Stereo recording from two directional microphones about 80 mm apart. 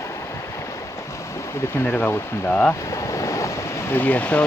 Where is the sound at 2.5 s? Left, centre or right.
Centre.